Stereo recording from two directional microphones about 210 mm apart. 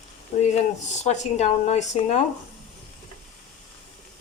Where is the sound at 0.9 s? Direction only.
35° left (ahead or behind).